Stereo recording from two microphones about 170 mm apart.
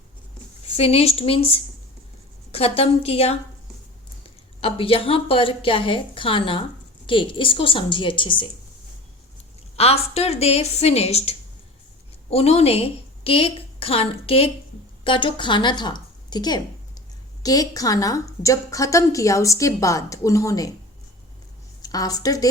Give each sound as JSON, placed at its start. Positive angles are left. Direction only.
{"t": 0.8, "sound": "a woman's voice", "side_deg": 35}
{"t": 4.6, "sound": "a woman's voice", "side_deg": 35}
{"t": 9.7, "sound": "a woman's voice", "side_deg": 35}
{"t": 21.8, "sound": "a woman's voice", "side_deg": 20}